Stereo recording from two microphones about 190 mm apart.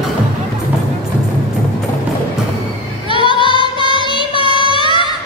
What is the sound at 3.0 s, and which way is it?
Music, 25° left (ahead or behind).